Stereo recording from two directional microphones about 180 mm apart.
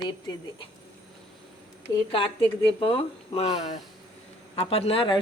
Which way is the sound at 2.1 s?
30° left (ahead or behind).